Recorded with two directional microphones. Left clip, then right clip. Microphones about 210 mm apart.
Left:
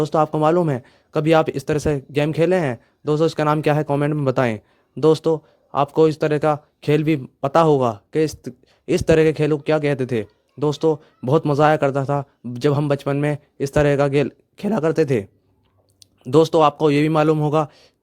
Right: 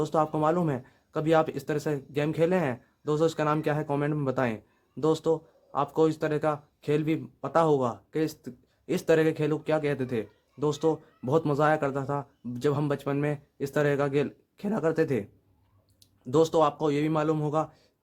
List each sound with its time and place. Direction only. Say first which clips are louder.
0.0 s speech: left 8 dB; 30° left (ahead or behind)